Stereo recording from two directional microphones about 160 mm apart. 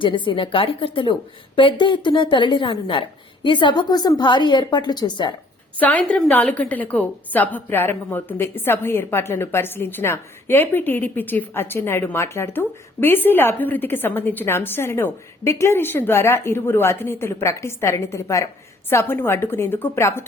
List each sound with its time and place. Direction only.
0.0 s a woman's voice: 30° left (ahead or behind)
5.8 s a woman's voice: 10° left (ahead or behind)